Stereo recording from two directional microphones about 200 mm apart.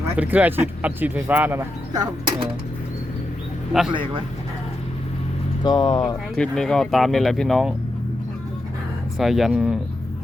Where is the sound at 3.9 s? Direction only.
25° right (ahead or behind).